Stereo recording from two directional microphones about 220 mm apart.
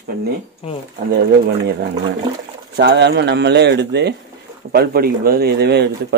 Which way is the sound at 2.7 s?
50° right (ahead or behind).